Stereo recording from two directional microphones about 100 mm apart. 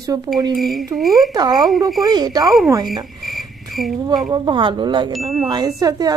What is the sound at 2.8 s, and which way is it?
Cricket, centre (ahead or behind).